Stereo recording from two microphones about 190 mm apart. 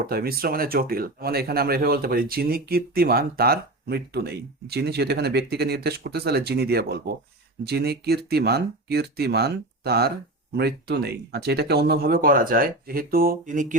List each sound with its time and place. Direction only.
0.1 s speech: 55° right (ahead or behind)